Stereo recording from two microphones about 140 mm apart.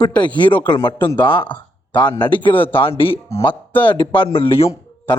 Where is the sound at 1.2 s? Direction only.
35° left (ahead or behind).